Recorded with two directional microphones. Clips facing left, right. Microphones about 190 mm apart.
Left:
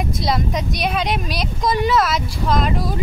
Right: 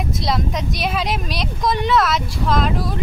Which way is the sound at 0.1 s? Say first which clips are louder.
Even; centre (ahead or behind).